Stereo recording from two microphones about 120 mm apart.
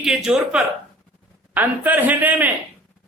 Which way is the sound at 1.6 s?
15° right (ahead or behind).